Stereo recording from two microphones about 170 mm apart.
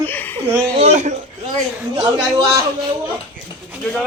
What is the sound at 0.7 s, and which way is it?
Speech, 40° right (ahead or behind).